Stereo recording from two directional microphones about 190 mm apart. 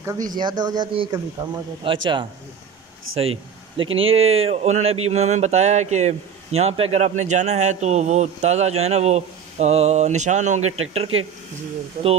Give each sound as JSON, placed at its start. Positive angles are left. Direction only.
{"t": 0.3, "sound": "speech", "side_deg": -25}
{"t": 3.2, "sound": "a man's voice", "side_deg": -30}